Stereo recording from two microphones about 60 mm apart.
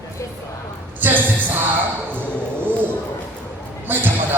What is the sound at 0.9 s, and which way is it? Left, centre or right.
Music, right.